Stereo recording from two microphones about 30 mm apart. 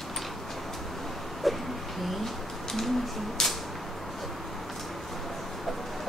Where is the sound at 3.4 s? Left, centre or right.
Centre.